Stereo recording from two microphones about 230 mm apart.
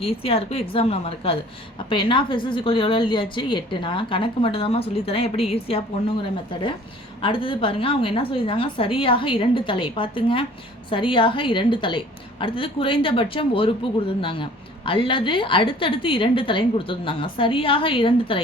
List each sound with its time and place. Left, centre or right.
0.0 s a woman's voice: left